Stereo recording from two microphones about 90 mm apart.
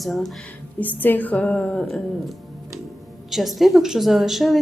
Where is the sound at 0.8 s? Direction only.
20° left (ahead or behind).